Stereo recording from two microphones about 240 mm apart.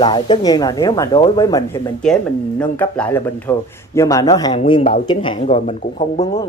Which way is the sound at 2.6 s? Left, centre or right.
Centre.